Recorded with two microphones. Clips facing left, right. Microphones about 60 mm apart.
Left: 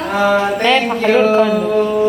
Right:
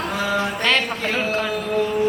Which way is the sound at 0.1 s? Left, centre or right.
Left.